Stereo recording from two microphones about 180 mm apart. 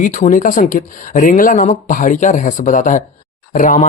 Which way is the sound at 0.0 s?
45° left (ahead or behind).